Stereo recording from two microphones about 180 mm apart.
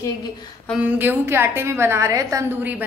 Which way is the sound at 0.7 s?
10° right (ahead or behind).